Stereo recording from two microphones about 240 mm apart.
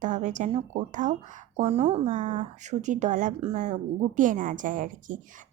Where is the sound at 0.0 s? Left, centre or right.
Right.